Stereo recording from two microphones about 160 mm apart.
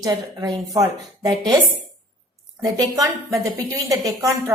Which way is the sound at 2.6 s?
20° right (ahead or behind).